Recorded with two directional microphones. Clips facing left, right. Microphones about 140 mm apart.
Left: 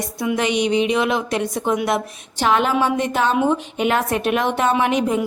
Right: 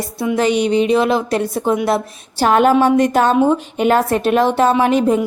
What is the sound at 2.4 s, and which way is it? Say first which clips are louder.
A woman's voice: right 6 dB; 45° right (ahead or behind).